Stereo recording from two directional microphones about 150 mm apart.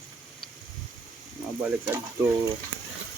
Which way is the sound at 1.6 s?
15° right (ahead or behind).